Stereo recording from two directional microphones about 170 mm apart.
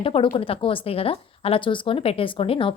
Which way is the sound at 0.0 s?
30° left (ahead or behind).